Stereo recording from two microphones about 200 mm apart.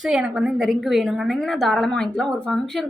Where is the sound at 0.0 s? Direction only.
5° right (ahead or behind).